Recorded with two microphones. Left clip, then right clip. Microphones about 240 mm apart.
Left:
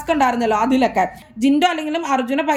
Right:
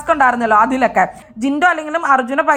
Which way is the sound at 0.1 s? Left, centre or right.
Centre.